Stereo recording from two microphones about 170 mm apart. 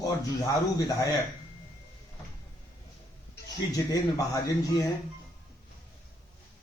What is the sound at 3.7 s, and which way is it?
Speech, 20° left (ahead or behind).